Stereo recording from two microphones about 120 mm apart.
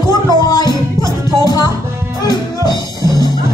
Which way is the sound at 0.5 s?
35° left (ahead or behind).